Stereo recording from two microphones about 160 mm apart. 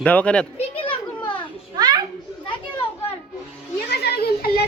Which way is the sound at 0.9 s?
30° left (ahead or behind).